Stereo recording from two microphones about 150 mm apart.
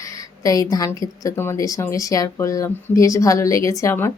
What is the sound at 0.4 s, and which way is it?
Speech, 25° left (ahead or behind).